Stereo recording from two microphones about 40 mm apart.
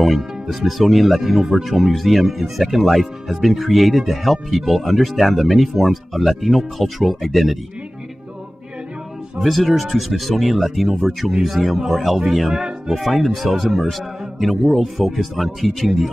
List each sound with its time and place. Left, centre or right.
0.0 s speech: centre
9.4 s speech: centre
12.4 s speech: centre
12.9 s speech: centre